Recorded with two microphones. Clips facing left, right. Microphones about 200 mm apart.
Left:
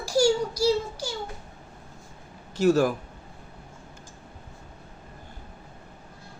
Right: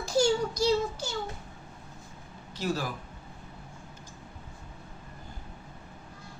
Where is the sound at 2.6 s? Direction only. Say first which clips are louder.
Left 11 dB; 45° left (ahead or behind).